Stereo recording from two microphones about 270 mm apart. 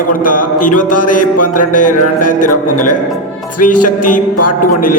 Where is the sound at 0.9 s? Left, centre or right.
Left.